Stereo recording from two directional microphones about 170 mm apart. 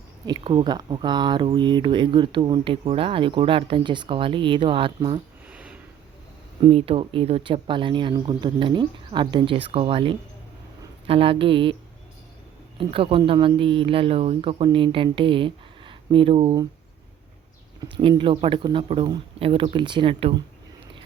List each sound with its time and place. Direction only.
0.3 s speech: 25° right (ahead or behind)
5.5 s a sound: 5° right (ahead or behind)
6.7 s speech: 35° right (ahead or behind)
12.9 s speech: 30° right (ahead or behind)
18.2 s speech: 30° right (ahead or behind)